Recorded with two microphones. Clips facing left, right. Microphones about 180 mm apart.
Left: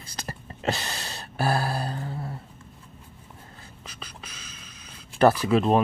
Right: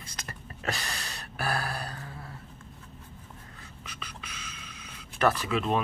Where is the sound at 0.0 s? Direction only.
30° left (ahead or behind).